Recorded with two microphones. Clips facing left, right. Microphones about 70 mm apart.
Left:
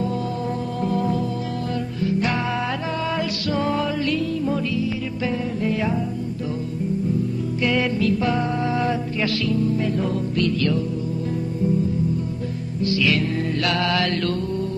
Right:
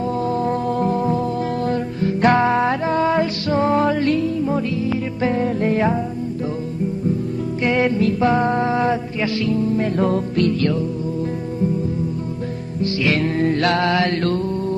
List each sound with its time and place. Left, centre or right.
0.5 s music: right
1.7 s music: right
7.6 s music: right
9.9 s music: right
12.8 s music: right